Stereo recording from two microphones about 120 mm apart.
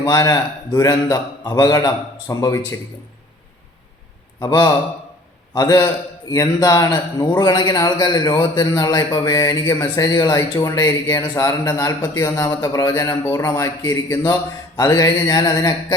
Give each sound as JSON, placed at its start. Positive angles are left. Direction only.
{"t": 0.0, "sound": "a man's voice", "side_deg": 30}
{"t": 4.4, "sound": "a man's voice", "side_deg": 35}